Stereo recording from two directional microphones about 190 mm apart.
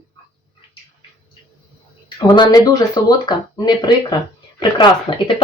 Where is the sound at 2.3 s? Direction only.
20° left (ahead or behind).